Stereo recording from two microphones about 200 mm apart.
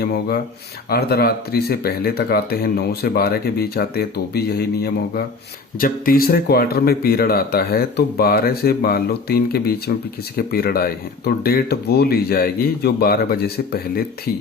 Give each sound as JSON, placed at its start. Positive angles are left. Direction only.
{"t": 0.0, "sound": "speech", "side_deg": 50}